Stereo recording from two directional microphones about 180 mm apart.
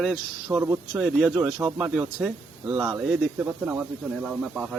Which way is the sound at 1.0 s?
5° right (ahead or behind).